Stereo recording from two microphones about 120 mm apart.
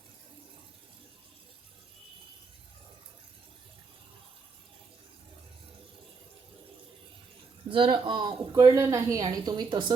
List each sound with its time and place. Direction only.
7.7 s speech: 45° right (ahead or behind)
8.5 s a woman's voice: 30° right (ahead or behind)